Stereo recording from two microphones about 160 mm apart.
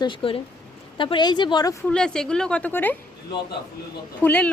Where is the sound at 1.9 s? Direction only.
5° left (ahead or behind).